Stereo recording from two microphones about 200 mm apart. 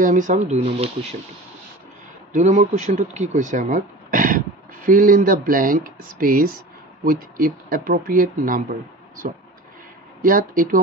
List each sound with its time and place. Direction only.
0.0 s speech: 40° right (ahead or behind)
2.3 s speech: 35° right (ahead or behind)
10.2 s speech: 45° right (ahead or behind)